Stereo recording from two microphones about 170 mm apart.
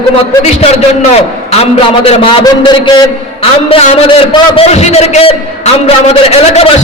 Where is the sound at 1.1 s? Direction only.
35° left (ahead or behind).